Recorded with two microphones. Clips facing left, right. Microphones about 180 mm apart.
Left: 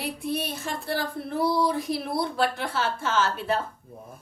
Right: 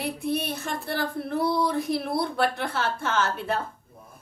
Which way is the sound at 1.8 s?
55° right (ahead or behind).